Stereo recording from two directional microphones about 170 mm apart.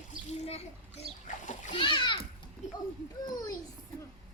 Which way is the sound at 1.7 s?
30° left (ahead or behind).